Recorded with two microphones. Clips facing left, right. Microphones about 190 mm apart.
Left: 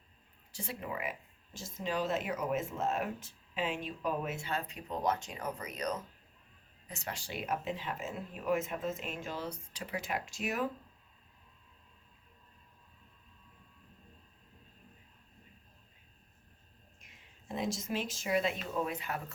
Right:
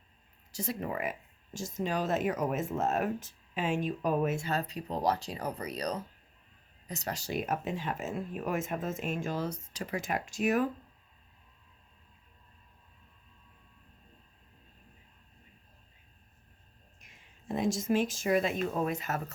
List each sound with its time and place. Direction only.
0.5 s speech: 40° right (ahead or behind)
17.5 s speech: 50° right (ahead or behind)